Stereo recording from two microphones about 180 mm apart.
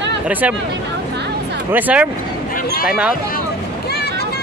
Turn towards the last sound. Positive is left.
turn(degrees=-5)  # may be behind; listen again after turning